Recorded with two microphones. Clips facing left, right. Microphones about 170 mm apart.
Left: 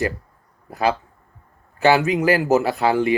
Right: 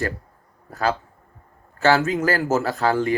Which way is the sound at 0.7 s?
15° left (ahead or behind).